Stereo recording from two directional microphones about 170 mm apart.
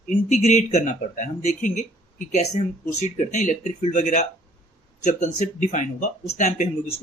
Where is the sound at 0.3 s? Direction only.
40° left (ahead or behind).